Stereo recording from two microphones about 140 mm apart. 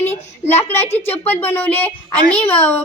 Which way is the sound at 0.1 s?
15° left (ahead or behind).